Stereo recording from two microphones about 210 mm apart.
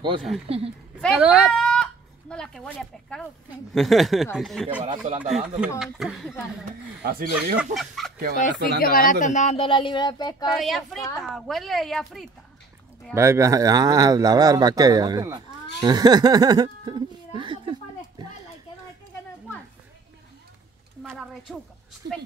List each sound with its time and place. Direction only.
1.0 s a woman's voice: 5° right (ahead or behind)
4.8 s speech: 35° right (ahead or behind)
5.2 s a woman's voice: 5° right (ahead or behind)
7.0 s speech: 45° right (ahead or behind)
7.7 s a woman's voice: centre (ahead or behind)
8.4 s speech: 40° left (ahead or behind); by 10.3 s 20° left (ahead or behind)
10.4 s a woman's voice: centre (ahead or behind)
13.1 s speech: 15° right (ahead or behind)
17.4 s a sound: 25° right (ahead or behind)
21.0 s a sound: centre (ahead or behind)